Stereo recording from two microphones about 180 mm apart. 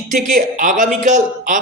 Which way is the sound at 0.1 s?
45° right (ahead or behind).